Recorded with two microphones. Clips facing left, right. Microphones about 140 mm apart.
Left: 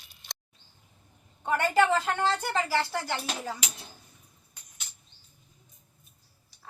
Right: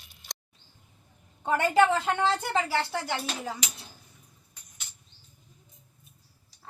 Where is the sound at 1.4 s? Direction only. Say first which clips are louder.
Right 2 dB; 25° right (ahead or behind).